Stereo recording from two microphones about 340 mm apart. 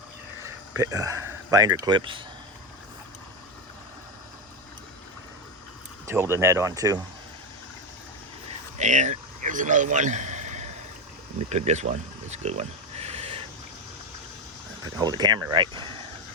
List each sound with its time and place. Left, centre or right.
0.4 s a sound: centre
1.8 s speech: centre
6.1 s speech: centre
8.8 s a man's voice: right
14.9 s speech: centre